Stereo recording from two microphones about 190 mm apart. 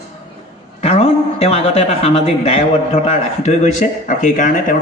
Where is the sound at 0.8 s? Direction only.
30° left (ahead or behind).